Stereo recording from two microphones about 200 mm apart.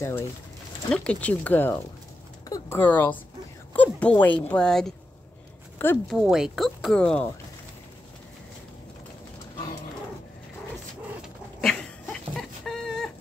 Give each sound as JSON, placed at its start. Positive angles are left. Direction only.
{"t": 0.8, "sound": "speech", "side_deg": 5}
{"t": 6.1, "sound": "speech", "side_deg": -5}
{"t": 11.6, "sound": "dog", "side_deg": 0}